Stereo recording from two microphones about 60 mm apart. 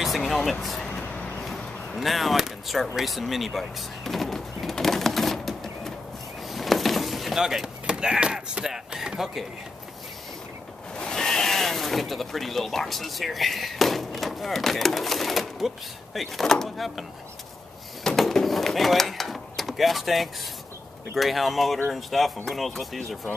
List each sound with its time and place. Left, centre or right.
0.0 s speech: centre
0.8 s vehicle: left
1.4 s a sound: centre
11.0 s speech: centre
18.0 s a sound: centre
21.1 s speech: centre